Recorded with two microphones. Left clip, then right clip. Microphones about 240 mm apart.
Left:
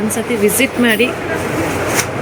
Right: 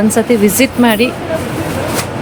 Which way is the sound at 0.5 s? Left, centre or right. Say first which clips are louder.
Right 2 dB; centre.